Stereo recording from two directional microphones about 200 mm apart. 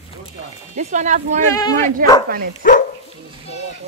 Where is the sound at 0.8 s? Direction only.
35° right (ahead or behind).